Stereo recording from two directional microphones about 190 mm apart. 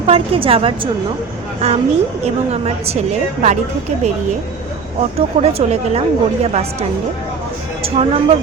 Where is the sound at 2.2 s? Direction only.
35° right (ahead or behind).